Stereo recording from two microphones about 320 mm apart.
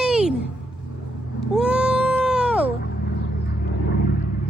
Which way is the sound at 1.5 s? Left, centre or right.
Centre.